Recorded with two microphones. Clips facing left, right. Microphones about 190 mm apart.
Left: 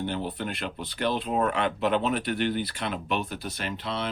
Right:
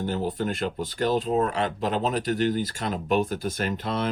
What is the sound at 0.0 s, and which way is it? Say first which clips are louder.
Speech: right 4 dB; 40° right (ahead or behind).